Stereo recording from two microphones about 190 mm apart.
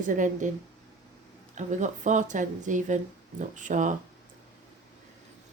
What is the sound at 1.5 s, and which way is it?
Speech, 40° right (ahead or behind).